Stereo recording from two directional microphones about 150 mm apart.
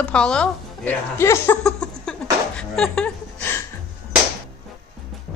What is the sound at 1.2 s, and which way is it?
Speech, 20° left (ahead or behind).